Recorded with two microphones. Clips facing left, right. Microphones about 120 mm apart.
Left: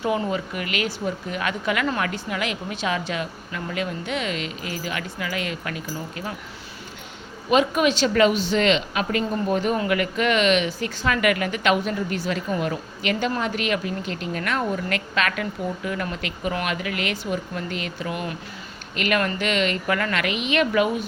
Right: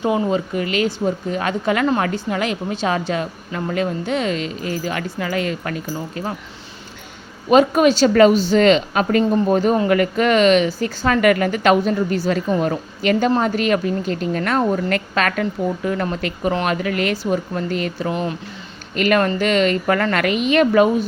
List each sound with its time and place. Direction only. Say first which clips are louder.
0.0 s a woman's voice: right 5 dB; 25° right (ahead or behind)
7.5 s a woman's voice: right 6 dB; 40° right (ahead or behind)